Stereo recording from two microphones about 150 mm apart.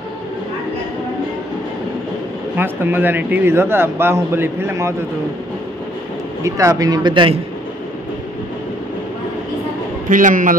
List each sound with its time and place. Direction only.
2.5 s speech: 15° right (ahead or behind)
6.4 s a man's voice: 20° right (ahead or behind)
10.0 s a man's voice: 60° right (ahead or behind)